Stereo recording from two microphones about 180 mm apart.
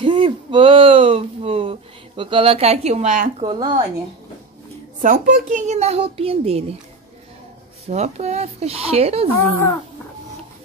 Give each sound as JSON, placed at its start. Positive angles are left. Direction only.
{"t": 0.0, "sound": "speech", "side_deg": -30}
{"t": 3.4, "sound": "speech", "side_deg": -25}
{"t": 5.0, "sound": "a child's voice", "side_deg": -45}
{"t": 7.8, "sound": "a child's voice", "side_deg": -40}